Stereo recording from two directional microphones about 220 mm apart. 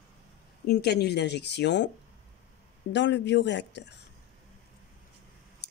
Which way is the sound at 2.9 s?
55° left (ahead or behind).